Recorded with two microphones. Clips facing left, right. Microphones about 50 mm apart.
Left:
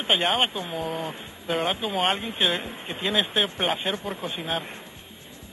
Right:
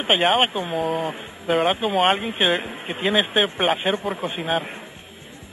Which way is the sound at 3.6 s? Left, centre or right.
Centre.